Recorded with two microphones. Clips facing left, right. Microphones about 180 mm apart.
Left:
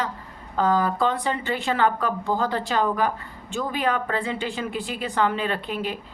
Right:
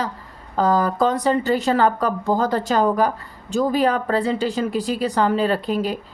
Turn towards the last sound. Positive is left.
turn(degrees=-40)  # may be behind; listen again after turning